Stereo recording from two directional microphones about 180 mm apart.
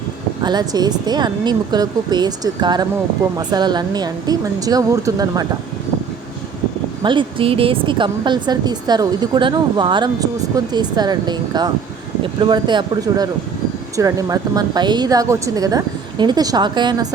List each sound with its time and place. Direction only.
0.4 s a woman's voice: 20° right (ahead or behind)
7.0 s a woman's voice: 25° right (ahead or behind)